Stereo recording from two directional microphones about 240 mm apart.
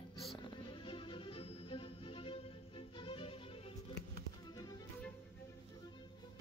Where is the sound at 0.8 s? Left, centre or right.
Left.